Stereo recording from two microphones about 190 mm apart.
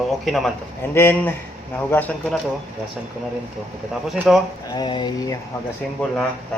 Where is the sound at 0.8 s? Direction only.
10° left (ahead or behind).